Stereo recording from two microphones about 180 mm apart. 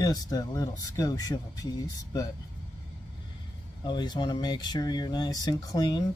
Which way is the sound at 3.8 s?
25° left (ahead or behind).